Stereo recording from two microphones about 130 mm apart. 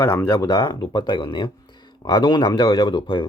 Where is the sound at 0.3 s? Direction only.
35° left (ahead or behind).